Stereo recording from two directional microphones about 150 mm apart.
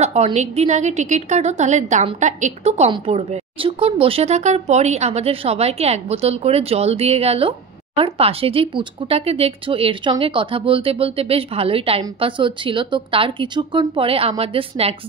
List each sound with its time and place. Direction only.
0.0 s a woman's voice: 45° right (ahead or behind)